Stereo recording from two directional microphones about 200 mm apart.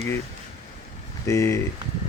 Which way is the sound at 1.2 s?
15° left (ahead or behind).